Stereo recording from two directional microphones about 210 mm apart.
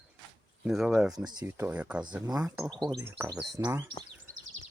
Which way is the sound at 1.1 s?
20° right (ahead or behind).